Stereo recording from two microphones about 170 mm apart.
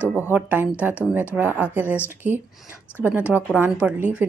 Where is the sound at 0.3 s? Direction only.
10° right (ahead or behind).